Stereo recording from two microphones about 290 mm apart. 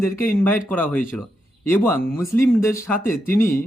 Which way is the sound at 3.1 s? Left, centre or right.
Left.